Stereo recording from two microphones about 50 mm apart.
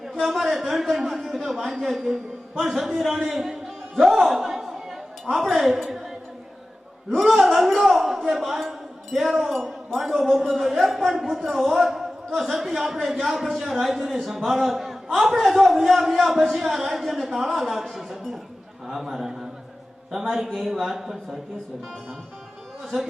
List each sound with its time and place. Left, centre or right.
0.2 s a man's voice: centre
7.1 s a man's voice: centre
22.8 s a man's voice: centre